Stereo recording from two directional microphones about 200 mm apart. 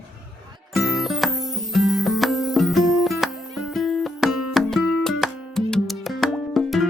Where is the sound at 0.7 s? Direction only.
Centre (ahead or behind).